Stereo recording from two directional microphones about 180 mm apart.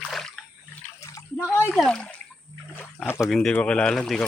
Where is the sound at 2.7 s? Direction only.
5° left (ahead or behind).